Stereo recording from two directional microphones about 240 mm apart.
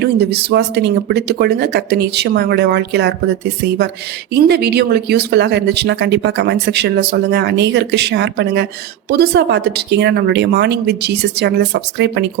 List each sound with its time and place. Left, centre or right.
0.0 s speech: right